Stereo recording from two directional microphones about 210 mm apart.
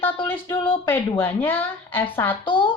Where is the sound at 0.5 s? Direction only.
25° left (ahead or behind).